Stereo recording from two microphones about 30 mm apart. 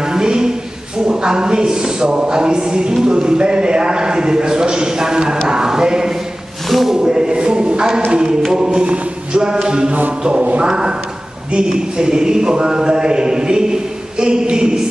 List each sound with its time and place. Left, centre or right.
0.0 s a sound: right
1.0 s speech: right
8.8 s speech: right
9.4 s speech: right